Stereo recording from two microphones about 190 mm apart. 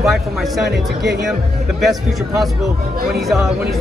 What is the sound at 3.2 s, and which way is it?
Speech, centre (ahead or behind).